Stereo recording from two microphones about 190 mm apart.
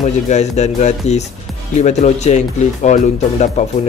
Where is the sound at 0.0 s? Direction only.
35° left (ahead or behind).